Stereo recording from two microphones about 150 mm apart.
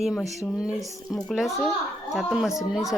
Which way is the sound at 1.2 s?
Centre (ahead or behind).